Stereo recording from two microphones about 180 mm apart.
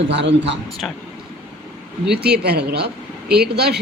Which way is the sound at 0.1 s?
75° right (ahead or behind).